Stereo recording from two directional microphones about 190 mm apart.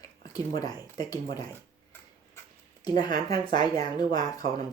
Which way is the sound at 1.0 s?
20° left (ahead or behind).